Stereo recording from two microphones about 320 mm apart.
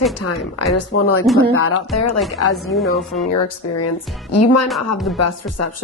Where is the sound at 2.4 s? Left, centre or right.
Left.